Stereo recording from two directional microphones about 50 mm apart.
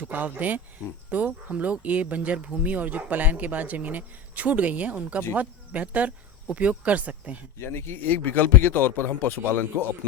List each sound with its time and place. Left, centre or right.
0.1 s speech: right
7.6 s speech: left
7.9 s speech: left